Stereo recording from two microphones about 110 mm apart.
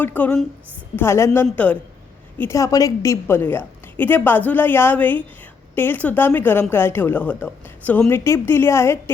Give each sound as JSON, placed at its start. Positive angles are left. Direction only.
{"t": 0.0, "sound": "a woman's voice", "side_deg": 15}
{"t": 2.5, "sound": "speech", "side_deg": 30}